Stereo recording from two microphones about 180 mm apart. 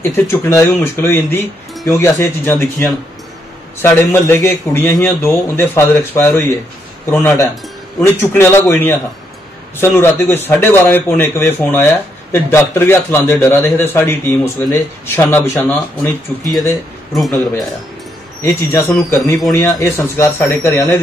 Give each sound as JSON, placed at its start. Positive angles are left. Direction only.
{"t": 0.0, "sound": "speech", "side_deg": 15}
{"t": 9.9, "sound": "speech", "side_deg": 10}
{"t": 17.1, "sound": "speech", "side_deg": 0}
{"t": 18.4, "sound": "speech", "side_deg": 15}